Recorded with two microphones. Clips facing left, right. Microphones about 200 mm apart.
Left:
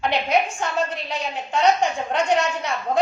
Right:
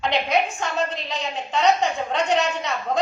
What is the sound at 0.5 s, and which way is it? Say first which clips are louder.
A woman's voice: left 1 dB; 10° left (ahead or behind).